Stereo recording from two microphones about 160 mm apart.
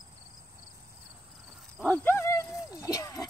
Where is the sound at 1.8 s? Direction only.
10° left (ahead or behind).